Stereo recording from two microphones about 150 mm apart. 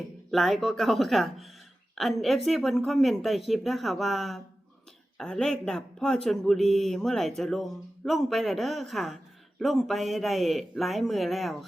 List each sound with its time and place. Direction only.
0.3 s speech: centre (ahead or behind)